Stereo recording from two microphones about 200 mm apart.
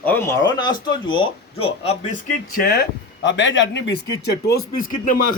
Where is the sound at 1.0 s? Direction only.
25° left (ahead or behind).